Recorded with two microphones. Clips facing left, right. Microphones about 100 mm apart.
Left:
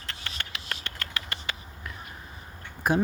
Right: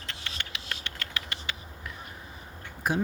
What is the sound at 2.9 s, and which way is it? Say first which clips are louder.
Speech: left 4 dB; 50° left (ahead or behind).